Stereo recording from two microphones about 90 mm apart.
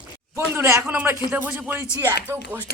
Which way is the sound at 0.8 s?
15° right (ahead or behind).